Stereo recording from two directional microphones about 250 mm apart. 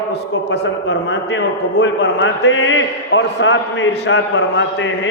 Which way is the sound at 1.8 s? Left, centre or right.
Left.